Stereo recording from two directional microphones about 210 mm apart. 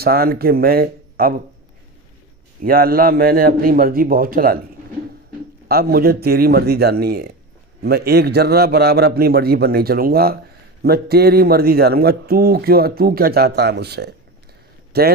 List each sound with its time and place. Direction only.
0.0 s a man's voice: 45° right (ahead or behind)
2.6 s a man's voice: 45° right (ahead or behind)
5.7 s a man's voice: 45° right (ahead or behind)